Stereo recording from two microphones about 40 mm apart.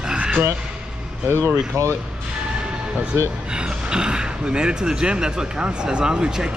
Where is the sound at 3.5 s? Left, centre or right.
Right.